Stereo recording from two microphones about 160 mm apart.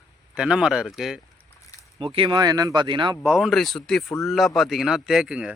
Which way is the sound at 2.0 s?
35° right (ahead or behind).